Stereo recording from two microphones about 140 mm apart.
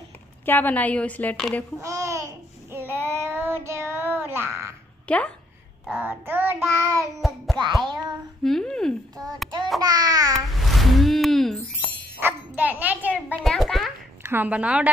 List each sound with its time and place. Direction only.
0.5 s a woman's voice: 10° left (ahead or behind)
1.8 s babbling: 20° right (ahead or behind)
4.1 s frog: 15° right (ahead or behind)
5.0 s speech: 10° left (ahead or behind)
5.9 s child singing: 10° right (ahead or behind)
7.2 s a sound: centre (ahead or behind)
7.5 s child singing: 30° right (ahead or behind)
8.5 s a sound: 5° left (ahead or behind)
9.2 s child singing: 25° right (ahead or behind)
9.8 s babbling: 25° right (ahead or behind)
10.3 s music: centre (ahead or behind)
12.2 s bow-wow: 10° right (ahead or behind)
13.4 s a sound: centre (ahead or behind)
14.2 s a woman's voice: 15° right (ahead or behind)